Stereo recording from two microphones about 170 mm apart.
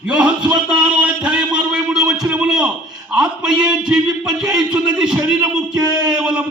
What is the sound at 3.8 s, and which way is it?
A man's voice, 5° right (ahead or behind).